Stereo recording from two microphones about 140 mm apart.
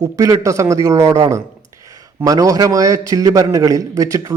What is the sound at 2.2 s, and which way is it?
A man's voice, 25° right (ahead or behind).